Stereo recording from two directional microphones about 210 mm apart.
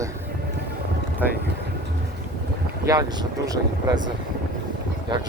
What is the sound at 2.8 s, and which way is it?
Speech, 15° right (ahead or behind).